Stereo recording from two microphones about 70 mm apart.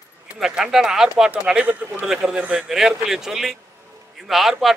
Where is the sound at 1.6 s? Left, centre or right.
Right.